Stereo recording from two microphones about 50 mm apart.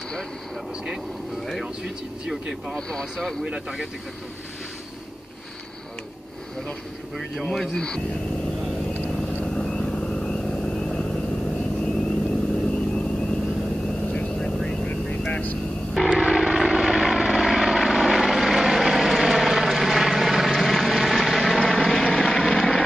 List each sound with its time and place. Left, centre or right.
2.7 s speech: centre
3.4 s speech: centre
7.4 s speech: centre
9.5 s vehicle: centre
16.2 s vehicle: centre